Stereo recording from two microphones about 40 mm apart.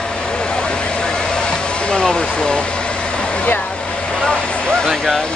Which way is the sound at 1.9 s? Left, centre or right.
Left.